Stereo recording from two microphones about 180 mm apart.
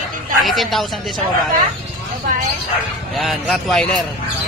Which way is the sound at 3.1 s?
Centre (ahead or behind).